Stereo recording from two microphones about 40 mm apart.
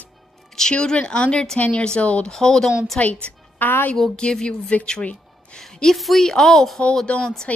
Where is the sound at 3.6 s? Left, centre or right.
Left.